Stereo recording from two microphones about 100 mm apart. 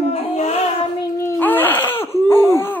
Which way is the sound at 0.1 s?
90° left.